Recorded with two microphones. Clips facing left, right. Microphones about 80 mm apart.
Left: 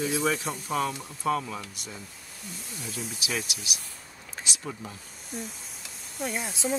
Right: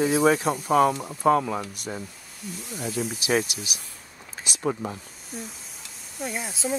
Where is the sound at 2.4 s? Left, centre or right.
Centre.